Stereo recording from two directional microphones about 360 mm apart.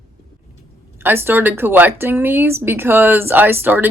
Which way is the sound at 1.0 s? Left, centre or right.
Centre.